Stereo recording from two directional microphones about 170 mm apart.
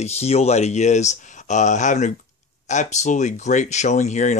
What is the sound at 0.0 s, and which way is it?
Speech, 40° left (ahead or behind).